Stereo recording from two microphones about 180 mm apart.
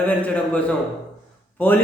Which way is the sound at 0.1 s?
10° left (ahead or behind).